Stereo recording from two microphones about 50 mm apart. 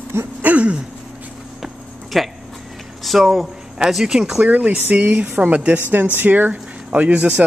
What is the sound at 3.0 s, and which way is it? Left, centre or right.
Speech, centre.